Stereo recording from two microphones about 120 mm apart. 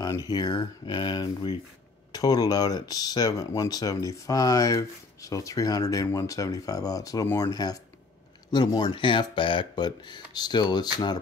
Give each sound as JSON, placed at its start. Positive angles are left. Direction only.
{"t": 0.0, "sound": "speech", "side_deg": 35}